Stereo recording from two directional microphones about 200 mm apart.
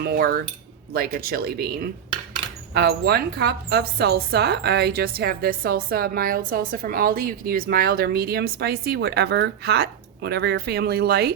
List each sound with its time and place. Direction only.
0.0 s speech: 50° right (ahead or behind)